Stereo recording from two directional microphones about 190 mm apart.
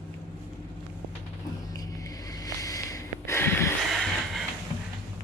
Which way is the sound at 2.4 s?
20° left (ahead or behind).